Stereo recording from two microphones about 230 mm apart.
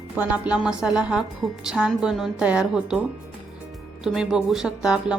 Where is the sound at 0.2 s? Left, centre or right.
Centre.